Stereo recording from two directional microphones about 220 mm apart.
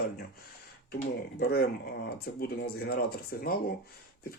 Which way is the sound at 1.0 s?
45° left (ahead or behind).